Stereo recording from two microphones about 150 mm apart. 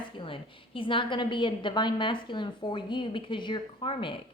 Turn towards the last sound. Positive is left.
turn(degrees=35)  # may be behind; listen again after turning